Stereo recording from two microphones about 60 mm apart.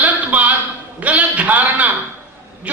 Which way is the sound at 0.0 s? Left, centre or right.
Right.